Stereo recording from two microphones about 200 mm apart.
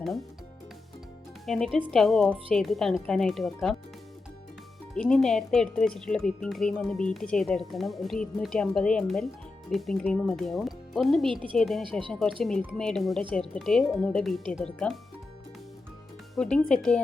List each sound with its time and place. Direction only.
1.5 s speech: centre (ahead or behind)
4.9 s speech: 5° left (ahead or behind)
11.9 s speech: 25° right (ahead or behind)
12.2 s speech: 5° left (ahead or behind)
16.3 s speech: 5° left (ahead or behind)